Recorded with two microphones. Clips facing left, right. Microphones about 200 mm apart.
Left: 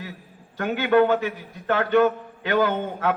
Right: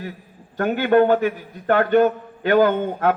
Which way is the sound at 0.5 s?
45° right (ahead or behind).